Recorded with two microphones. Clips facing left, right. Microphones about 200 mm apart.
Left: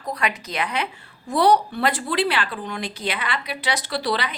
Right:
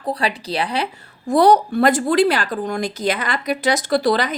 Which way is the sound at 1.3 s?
45° right (ahead or behind).